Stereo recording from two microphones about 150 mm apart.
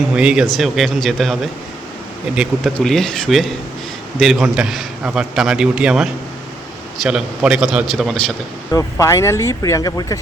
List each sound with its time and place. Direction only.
0.2 s a man's voice: 5° right (ahead or behind)
2.7 s a man's voice: 5° left (ahead or behind)
8.7 s speech: 20° left (ahead or behind)